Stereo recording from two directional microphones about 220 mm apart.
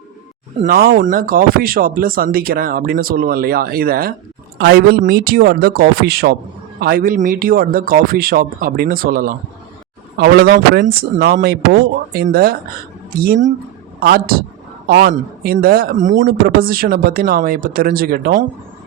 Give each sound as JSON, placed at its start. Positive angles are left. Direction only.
{"t": 0.6, "sound": "speech", "side_deg": -45}